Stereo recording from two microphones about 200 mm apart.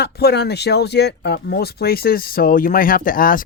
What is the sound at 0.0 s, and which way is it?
Speech, 50° left (ahead or behind).